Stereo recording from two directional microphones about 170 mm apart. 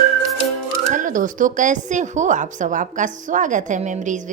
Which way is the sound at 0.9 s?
50° right (ahead or behind).